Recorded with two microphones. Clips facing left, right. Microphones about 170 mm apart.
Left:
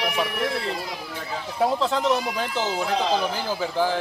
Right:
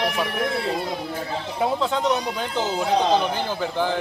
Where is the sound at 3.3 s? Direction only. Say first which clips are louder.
Right 1 dB; 5° left (ahead or behind).